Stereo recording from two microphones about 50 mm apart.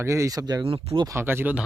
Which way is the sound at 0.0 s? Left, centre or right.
Right.